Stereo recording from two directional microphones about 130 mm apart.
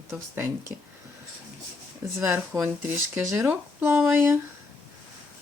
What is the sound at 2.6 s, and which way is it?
Speech, 15° right (ahead or behind).